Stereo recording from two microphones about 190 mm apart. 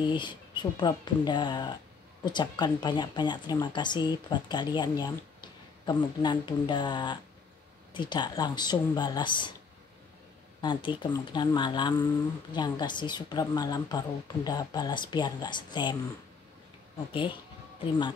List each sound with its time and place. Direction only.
0.0 s speech: 25° left (ahead or behind)
10.6 s speech: 25° left (ahead or behind)
17.7 s speech: 25° left (ahead or behind)